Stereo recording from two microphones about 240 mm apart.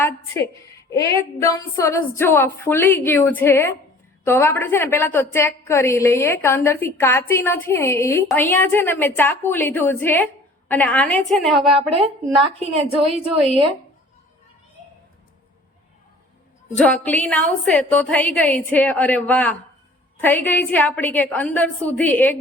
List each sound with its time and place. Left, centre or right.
1.4 s a woman's voice: centre
12.4 s a woman's voice: right
16.7 s a woman's voice: centre